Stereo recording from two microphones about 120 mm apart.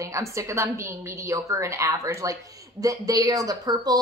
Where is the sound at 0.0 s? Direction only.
25° right (ahead or behind).